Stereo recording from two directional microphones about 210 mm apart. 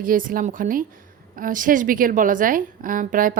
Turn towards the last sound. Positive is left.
turn(degrees=-40)  # may be behind; listen again after turning